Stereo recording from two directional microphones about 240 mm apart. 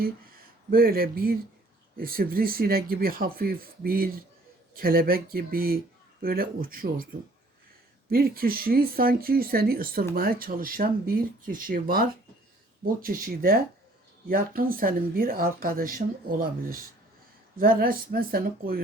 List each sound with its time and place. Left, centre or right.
0.7 s speech: right
8.1 s speech: right